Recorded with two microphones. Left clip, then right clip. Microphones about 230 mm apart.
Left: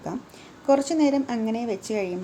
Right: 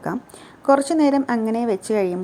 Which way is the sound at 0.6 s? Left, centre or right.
Centre.